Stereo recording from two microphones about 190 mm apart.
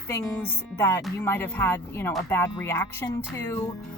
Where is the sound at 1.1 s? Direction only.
15° left (ahead or behind).